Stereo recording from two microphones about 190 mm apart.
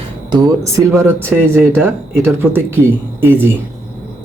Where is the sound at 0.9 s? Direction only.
10° right (ahead or behind).